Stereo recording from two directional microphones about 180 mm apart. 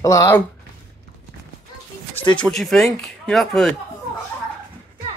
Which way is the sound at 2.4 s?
Centre (ahead or behind).